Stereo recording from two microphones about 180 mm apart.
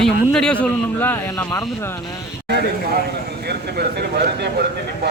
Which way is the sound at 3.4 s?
65° right (ahead or behind).